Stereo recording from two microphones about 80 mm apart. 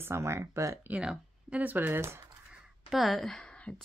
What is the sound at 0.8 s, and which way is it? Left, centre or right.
Speech, centre.